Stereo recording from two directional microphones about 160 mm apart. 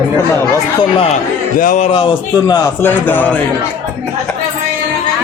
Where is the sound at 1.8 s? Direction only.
35° left (ahead or behind).